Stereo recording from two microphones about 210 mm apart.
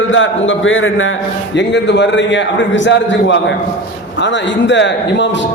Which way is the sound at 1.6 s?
55° left (ahead or behind).